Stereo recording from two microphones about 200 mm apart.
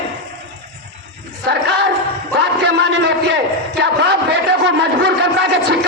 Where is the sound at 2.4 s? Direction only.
60° right (ahead or behind).